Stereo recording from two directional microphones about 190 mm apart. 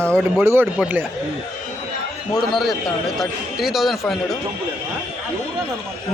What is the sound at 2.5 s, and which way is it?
Speech, centre (ahead or behind).